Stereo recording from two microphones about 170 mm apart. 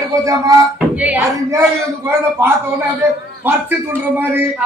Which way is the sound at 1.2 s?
20° right (ahead or behind).